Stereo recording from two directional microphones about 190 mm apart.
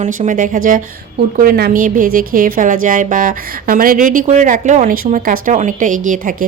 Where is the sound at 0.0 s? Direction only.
45° right (ahead or behind).